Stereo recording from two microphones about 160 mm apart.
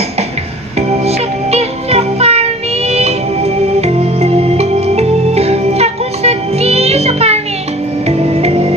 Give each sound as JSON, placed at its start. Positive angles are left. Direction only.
{"t": 0.7, "sound": "music", "side_deg": -40}